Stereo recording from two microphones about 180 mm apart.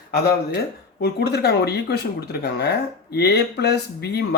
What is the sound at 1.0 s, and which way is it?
Speech, 65° left (ahead or behind).